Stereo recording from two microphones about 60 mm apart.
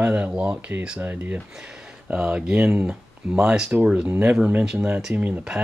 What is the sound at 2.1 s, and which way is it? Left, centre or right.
Speech, centre.